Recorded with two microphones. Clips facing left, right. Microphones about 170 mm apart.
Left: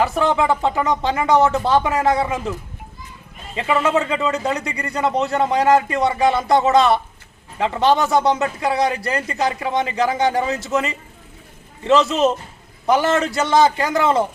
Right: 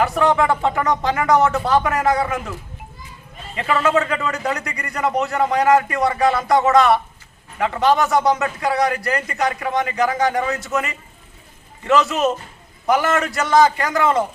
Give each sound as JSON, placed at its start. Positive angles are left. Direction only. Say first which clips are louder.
{"t": 0.0, "sound": "a man's voice", "louder": "right 1 dB", "side_deg": 30}
{"t": 3.5, "sound": "a man's voice", "louder": "even", "side_deg": 25}